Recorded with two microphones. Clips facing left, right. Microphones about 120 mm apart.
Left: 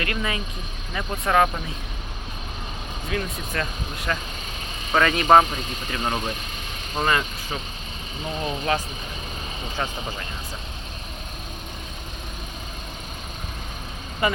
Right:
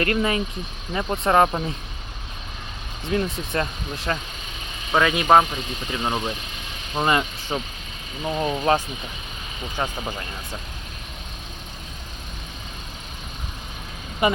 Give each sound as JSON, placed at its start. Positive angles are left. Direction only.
{"t": 0.0, "sound": "speech", "side_deg": -35}
{"t": 3.1, "sound": "speech", "side_deg": -30}
{"t": 4.9, "sound": "speech", "side_deg": -5}
{"t": 14.2, "sound": "speech", "side_deg": -20}